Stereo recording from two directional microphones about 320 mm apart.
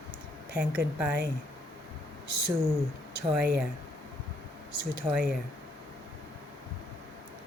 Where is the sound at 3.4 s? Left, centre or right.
Right.